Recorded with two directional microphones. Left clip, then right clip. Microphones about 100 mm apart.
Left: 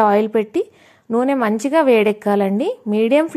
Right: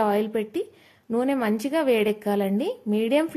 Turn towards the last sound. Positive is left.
turn(degrees=40)  # may be behind; listen again after turning